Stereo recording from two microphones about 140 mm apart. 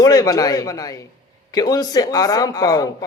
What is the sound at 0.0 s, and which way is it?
Speech, 25° left (ahead or behind).